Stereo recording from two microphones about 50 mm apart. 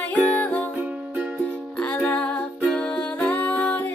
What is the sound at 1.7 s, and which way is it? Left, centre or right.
Music, left.